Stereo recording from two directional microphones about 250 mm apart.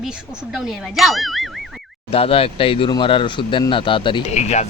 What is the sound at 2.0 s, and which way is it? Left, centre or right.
Speech, left.